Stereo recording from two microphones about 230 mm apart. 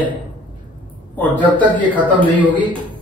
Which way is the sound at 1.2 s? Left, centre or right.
Centre.